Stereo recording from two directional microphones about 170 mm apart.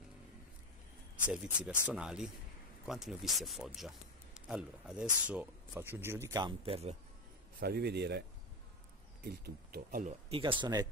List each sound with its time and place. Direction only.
1.3 s speech: 5° right (ahead or behind)
6.6 s speech: 35° right (ahead or behind)
7.6 s speech: 70° right (ahead or behind)
9.2 s speech: 65° right (ahead or behind)
10.3 s speech: 30° right (ahead or behind)